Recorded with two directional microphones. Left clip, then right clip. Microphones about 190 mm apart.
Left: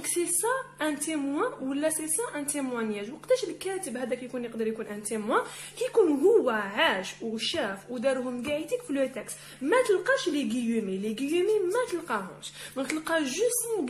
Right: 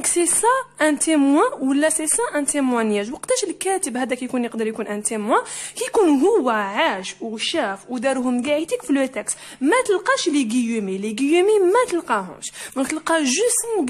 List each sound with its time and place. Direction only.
0.4 s a woman's voice: 45° right (ahead or behind)
13.7 s a woman's voice: 40° right (ahead or behind)